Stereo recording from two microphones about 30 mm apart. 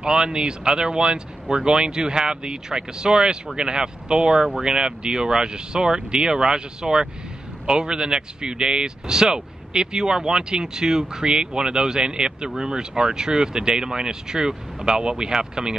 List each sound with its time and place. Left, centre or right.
0.0 s speech: right
15.0 s speech: right